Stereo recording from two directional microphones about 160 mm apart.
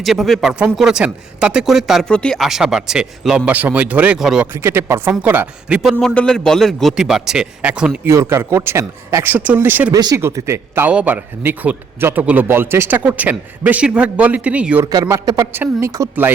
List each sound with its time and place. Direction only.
0.0 s speech: centre (ahead or behind)
4.5 s a man's voice: 15° right (ahead or behind)
9.9 s a man's voice: 20° right (ahead or behind)
14.8 s a man's voice: 20° right (ahead or behind)